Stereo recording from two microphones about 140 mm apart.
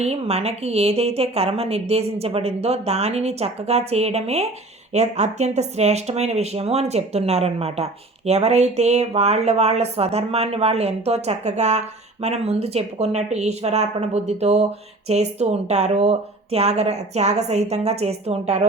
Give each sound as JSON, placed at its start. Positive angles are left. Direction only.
{"t": 0.0, "sound": "speech", "side_deg": -50}